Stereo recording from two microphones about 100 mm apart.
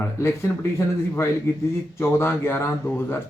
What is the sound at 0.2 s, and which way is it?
Speech, 25° left (ahead or behind).